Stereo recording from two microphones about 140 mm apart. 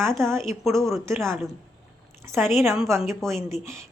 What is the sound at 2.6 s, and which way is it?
Speech, centre (ahead or behind).